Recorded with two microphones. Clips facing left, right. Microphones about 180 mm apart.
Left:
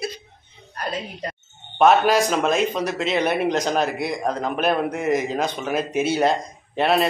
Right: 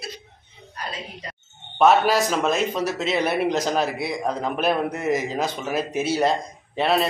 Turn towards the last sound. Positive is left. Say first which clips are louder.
# left 2 dB
turn(degrees=0)  # may be behind; listen again after turning